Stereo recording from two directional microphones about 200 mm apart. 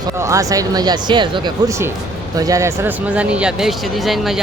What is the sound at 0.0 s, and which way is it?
Speech, 15° right (ahead or behind).